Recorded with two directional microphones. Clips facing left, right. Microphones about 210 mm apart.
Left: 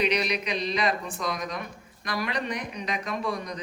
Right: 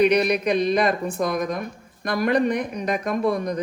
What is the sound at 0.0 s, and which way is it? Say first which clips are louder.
Speech: right 8 dB; 55° right (ahead or behind).